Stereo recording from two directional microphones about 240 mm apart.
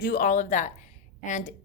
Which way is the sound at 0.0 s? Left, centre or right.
Left.